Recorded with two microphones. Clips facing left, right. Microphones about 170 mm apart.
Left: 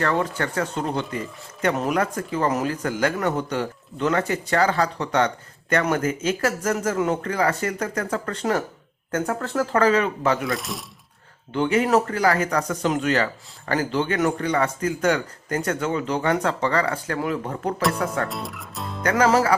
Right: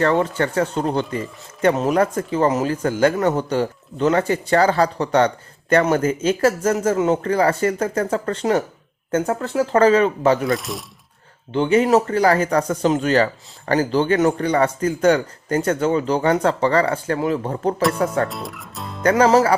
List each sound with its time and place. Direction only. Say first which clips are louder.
0.0 s speech: right 5 dB; 30° right (ahead or behind)
10.4 s speech: right 5 dB; centre (ahead or behind)
11.5 s speech: right 4 dB; 25° right (ahead or behind)
18.3 s speech: right 1 dB; centre (ahead or behind)
19.0 s speech: right 4 dB; 25° right (ahead or behind)